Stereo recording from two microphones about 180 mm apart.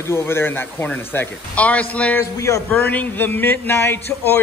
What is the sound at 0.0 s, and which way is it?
Speech, 15° left (ahead or behind).